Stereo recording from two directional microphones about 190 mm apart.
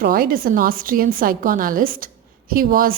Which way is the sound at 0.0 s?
50° right (ahead or behind).